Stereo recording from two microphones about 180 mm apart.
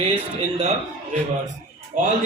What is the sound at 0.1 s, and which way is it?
Speech, 35° right (ahead or behind).